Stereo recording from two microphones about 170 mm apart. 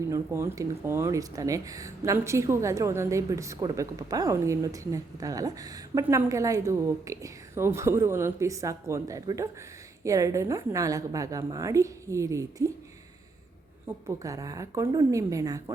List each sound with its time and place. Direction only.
0.1 s a woman's voice: 15° right (ahead or behind)
13.8 s a woman's voice: 20° right (ahead or behind)